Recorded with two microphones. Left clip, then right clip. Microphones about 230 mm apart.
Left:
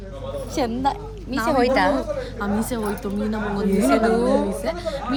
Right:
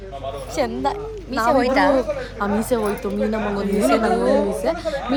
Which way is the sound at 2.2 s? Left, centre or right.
Centre.